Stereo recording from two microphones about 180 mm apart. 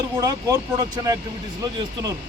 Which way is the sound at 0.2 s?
20° right (ahead or behind).